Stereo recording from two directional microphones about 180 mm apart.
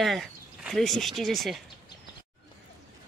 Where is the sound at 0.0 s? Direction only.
Centre (ahead or behind).